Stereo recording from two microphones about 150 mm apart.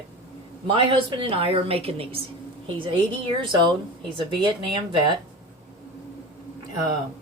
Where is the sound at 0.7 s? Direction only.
35° right (ahead or behind).